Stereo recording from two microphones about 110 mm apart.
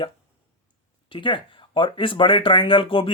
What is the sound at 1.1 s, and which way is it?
Speech, 50° left (ahead or behind).